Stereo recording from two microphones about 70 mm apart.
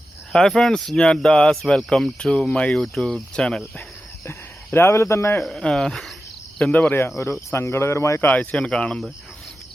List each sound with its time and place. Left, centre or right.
0.3 s speech: centre
2.7 s speech: centre
4.3 s speech: left
5.4 s speech: centre
6.6 s cricket: centre
7.2 s speech: left
8.2 s speech: left